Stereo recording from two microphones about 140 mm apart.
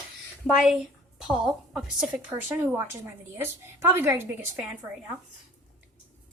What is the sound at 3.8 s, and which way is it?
Speech, 15° right (ahead or behind).